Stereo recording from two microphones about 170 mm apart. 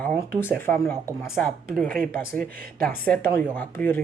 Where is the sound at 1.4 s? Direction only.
Centre (ahead or behind).